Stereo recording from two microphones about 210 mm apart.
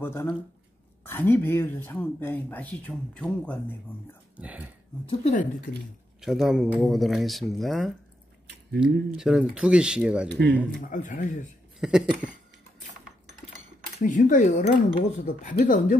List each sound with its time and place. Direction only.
0.0 s speech: 10° left (ahead or behind)
4.4 s speech: 5° right (ahead or behind)
5.0 s speech: 35° left (ahead or behind)
6.2 s speech: centre (ahead or behind)
10.2 s speech: 55° right (ahead or behind)
10.8 s speech: 40° left (ahead or behind)
11.8 s speech: 5° right (ahead or behind)
13.9 s speech: 35° left (ahead or behind)